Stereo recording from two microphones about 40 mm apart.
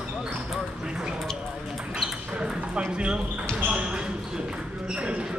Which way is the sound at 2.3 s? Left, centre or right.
Right.